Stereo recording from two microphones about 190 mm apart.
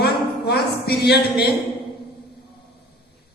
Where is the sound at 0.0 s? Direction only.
55° left (ahead or behind).